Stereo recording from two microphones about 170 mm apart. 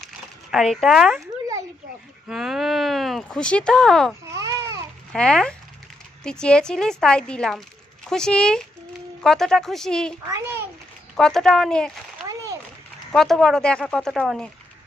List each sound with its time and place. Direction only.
0.5 s speech: centre (ahead or behind)
2.3 s speech: centre (ahead or behind)
4.4 s baby cry: 20° right (ahead or behind)
5.1 s speech: 5° left (ahead or behind)
11.2 s speech: centre (ahead or behind)
12.3 s a sound: 20° right (ahead or behind)
13.1 s speech: centre (ahead or behind)